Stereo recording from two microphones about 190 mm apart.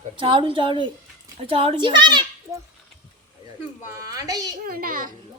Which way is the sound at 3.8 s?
20° right (ahead or behind).